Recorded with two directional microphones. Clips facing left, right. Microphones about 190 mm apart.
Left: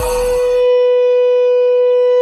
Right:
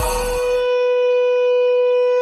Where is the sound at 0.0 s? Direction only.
Centre (ahead or behind).